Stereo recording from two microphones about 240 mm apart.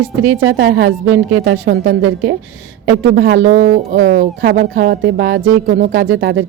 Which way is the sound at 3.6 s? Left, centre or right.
Right.